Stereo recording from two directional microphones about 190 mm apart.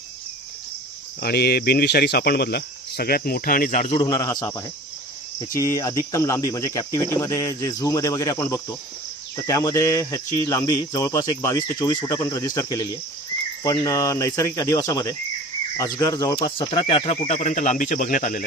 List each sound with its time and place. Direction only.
1.2 s speech: 55° left (ahead or behind); by 4.0 s 40° left (ahead or behind)
4.0 s a man's voice: 20° left (ahead or behind)
6.1 s speech: 15° left (ahead or behind); by 18.4 s 45° left (ahead or behind)